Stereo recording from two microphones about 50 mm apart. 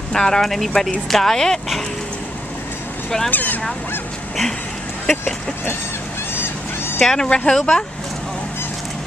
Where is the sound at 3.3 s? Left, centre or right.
Left.